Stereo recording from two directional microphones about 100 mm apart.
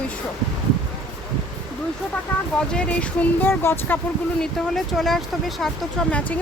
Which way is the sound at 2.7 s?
10° left (ahead or behind).